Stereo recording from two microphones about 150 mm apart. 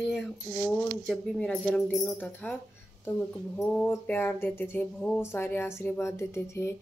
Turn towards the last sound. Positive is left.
turn(degrees=15)  # may be behind; listen again after turning